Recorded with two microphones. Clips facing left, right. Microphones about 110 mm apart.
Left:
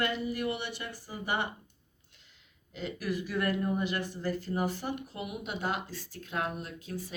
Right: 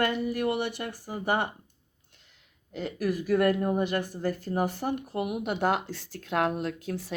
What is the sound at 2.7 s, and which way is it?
Speech, 45° right (ahead or behind).